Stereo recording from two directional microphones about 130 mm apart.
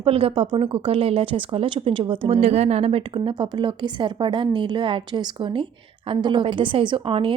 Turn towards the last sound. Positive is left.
turn(degrees=-40)  # may be behind; listen again after turning